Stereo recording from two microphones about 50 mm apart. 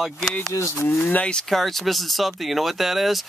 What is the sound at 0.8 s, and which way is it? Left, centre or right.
Speech, left.